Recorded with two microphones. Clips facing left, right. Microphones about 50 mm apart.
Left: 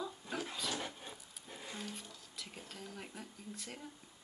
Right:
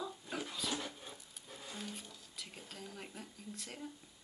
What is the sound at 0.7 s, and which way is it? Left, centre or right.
Wood, centre.